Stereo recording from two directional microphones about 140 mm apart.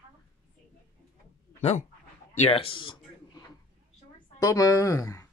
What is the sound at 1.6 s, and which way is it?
Speech, 50° left (ahead or behind).